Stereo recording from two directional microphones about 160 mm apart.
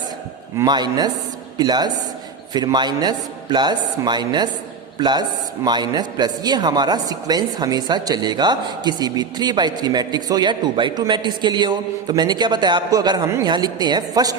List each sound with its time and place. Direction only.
0.5 s a woman's voice: 25° right (ahead or behind)